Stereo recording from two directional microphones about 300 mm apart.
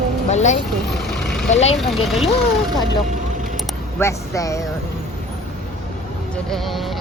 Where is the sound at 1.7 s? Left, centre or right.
Centre.